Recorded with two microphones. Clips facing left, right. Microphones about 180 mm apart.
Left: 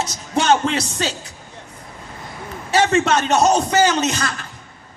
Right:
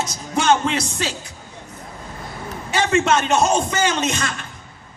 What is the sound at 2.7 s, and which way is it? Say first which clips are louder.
Speech: left 2 dB; 35° left (ahead or behind).